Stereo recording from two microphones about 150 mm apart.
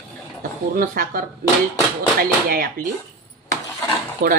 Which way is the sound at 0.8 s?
70° right (ahead or behind).